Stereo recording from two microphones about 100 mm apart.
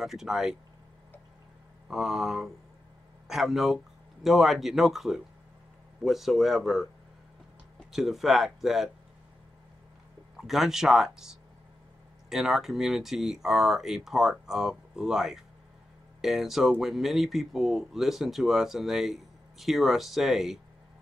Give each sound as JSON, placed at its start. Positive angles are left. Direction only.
{"t": 0.0, "sound": "speech", "side_deg": -5}
{"t": 1.9, "sound": "speech", "side_deg": -5}
{"t": 7.9, "sound": "speech", "side_deg": 0}
{"t": 10.3, "sound": "speech", "side_deg": 0}